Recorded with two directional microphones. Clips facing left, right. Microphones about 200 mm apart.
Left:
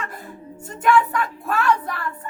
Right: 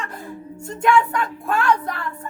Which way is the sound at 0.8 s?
5° left (ahead or behind).